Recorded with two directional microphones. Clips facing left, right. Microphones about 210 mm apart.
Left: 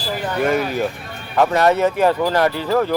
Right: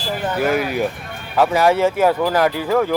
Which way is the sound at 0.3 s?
5° right (ahead or behind).